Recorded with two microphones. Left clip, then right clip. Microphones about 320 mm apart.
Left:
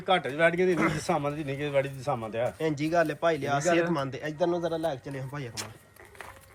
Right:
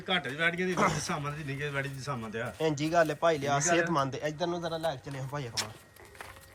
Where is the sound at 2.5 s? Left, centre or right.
Centre.